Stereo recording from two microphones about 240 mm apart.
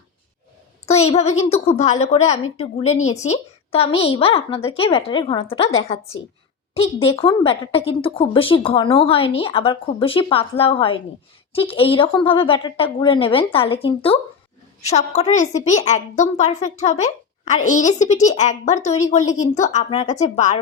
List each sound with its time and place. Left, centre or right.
0.9 s a woman's voice: left